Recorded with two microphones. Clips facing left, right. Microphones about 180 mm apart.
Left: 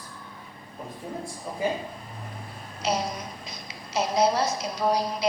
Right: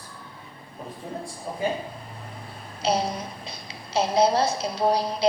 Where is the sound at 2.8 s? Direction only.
30° right (ahead or behind).